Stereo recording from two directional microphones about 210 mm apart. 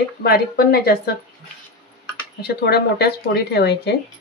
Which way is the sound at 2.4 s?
50° left (ahead or behind).